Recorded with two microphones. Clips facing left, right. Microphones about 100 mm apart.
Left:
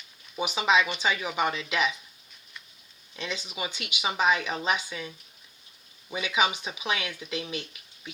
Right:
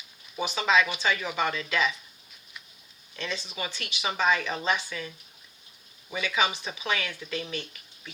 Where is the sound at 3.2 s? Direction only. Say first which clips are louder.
Even; 15° left (ahead or behind).